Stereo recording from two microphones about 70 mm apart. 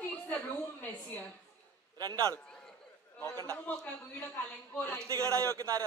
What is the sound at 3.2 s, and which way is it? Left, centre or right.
Speech, left.